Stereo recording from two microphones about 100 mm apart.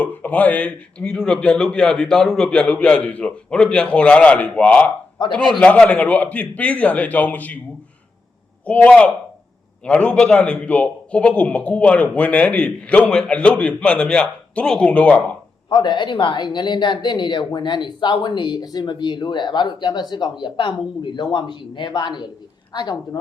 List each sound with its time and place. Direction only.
0.0 s a man's voice: 15° left (ahead or behind)
8.6 s a man's voice: 15° left (ahead or behind)
15.7 s speech: 50° left (ahead or behind)